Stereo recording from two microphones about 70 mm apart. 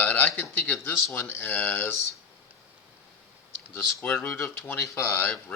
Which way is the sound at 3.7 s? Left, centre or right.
Left.